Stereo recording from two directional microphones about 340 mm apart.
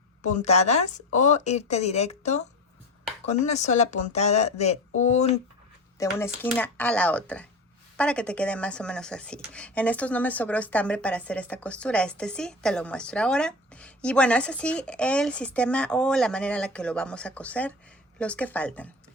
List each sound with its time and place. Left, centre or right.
0.2 s speech: left
6.0 s speech: centre